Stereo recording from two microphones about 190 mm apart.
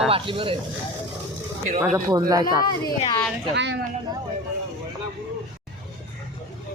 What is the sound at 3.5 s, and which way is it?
Speech, 70° right (ahead or behind).